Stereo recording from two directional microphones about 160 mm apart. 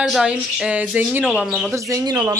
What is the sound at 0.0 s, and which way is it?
Speech, centre (ahead or behind).